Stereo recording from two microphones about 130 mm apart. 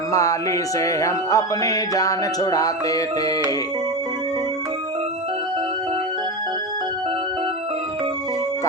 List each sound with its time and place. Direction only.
0.1 s music: 25° left (ahead or behind)